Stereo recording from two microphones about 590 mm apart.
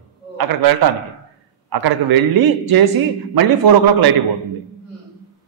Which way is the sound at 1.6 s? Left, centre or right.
Right.